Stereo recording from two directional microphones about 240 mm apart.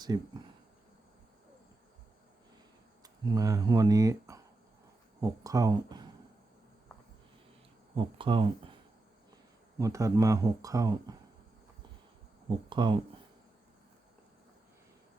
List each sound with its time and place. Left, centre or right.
0.0 s speech: centre
3.0 s speech: centre
7.9 s speech: right
9.7 s speech: centre
12.5 s speech: centre